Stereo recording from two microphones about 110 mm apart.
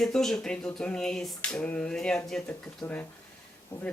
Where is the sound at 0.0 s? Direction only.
5° left (ahead or behind).